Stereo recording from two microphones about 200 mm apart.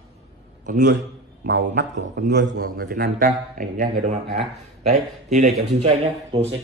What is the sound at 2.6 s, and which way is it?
A man's voice, 45° right (ahead or behind).